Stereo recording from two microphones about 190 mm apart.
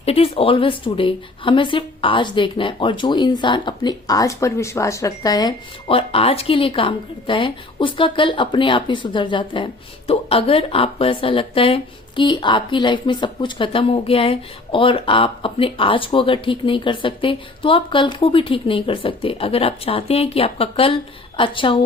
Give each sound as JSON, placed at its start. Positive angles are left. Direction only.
{"t": 0.0, "sound": "a woman's voice", "side_deg": 30}